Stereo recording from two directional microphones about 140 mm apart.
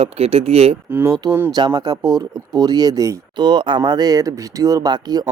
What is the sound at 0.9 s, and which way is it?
Speech, 15° right (ahead or behind).